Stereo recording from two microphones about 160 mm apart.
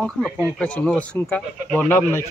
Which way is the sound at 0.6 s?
5° left (ahead or behind).